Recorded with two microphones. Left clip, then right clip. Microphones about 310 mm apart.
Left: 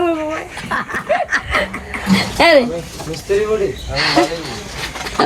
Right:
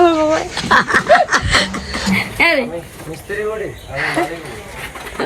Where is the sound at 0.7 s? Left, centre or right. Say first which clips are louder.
Right 8 dB; right.